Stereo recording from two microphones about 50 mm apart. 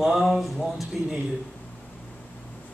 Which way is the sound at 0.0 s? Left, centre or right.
Centre.